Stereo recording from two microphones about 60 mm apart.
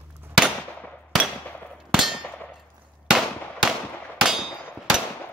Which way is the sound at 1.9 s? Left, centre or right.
Centre.